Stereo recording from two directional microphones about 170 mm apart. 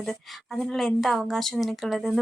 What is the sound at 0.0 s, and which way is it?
Speech, centre (ahead or behind).